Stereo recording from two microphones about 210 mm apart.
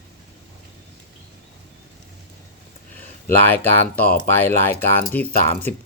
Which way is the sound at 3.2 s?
10° left (ahead or behind).